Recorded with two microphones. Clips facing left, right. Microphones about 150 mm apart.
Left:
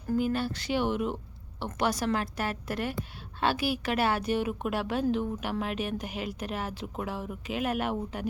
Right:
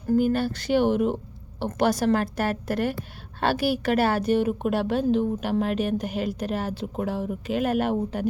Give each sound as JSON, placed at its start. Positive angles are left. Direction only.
{"t": 0.2, "sound": "a woman's voice", "side_deg": -45}